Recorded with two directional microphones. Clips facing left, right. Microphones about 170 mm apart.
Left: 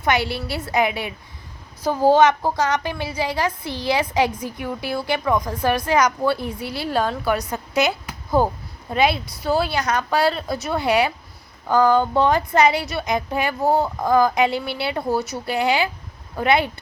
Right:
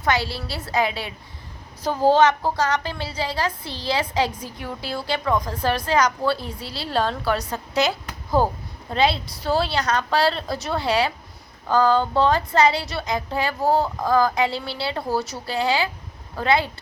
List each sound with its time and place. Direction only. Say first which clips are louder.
0.0 s a woman's voice: left 2 dB; 20° left (ahead or behind)
8.9 s a woman's voice: left 1 dB; 15° left (ahead or behind)